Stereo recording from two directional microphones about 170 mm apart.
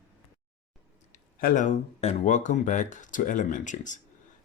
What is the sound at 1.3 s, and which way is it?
Speech, 50° left (ahead or behind).